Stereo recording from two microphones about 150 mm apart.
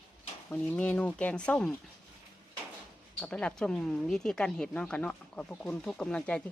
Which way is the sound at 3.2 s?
5° left (ahead or behind).